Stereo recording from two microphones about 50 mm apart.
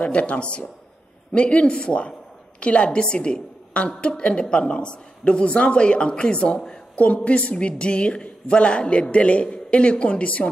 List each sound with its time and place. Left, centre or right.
0.0 s a woman's voice: left